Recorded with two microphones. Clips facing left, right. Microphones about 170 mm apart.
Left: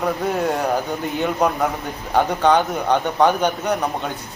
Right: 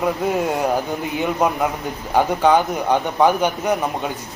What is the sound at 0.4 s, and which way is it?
Speech, 15° right (ahead or behind).